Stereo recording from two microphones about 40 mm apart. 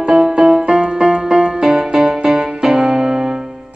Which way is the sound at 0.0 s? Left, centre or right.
Centre.